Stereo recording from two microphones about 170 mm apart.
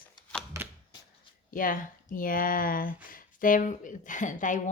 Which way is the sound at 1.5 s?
55° left (ahead or behind).